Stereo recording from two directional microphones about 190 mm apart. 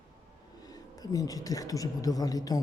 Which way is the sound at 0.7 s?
20° left (ahead or behind).